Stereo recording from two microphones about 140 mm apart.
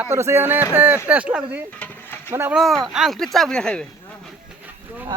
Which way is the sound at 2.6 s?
Centre (ahead or behind).